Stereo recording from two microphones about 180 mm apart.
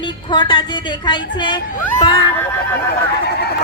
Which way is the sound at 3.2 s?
65° left (ahead or behind).